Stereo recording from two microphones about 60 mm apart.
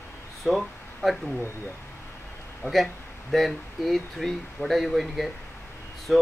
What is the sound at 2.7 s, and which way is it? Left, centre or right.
Speech, centre.